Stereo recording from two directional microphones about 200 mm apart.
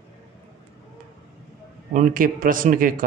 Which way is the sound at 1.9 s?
40° right (ahead or behind).